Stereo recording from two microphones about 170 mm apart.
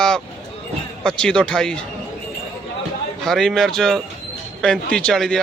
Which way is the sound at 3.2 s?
Centre (ahead or behind).